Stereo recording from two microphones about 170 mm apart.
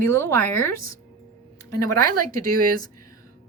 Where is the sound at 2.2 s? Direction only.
55° right (ahead or behind).